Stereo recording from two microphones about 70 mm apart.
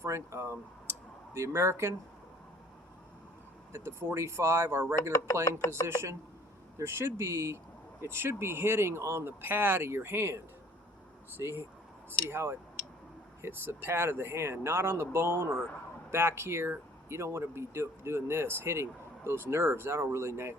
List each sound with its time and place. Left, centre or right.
0.0 s speech: right
0.9 s a sound: right
3.7 s speech: right
5.8 s speech: left
6.7 s speech: right